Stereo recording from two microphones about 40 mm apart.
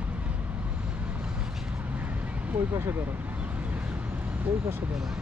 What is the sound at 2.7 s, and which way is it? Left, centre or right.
Speech, right.